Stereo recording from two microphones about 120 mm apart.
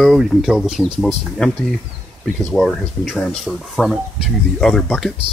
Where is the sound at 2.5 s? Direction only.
Centre (ahead or behind).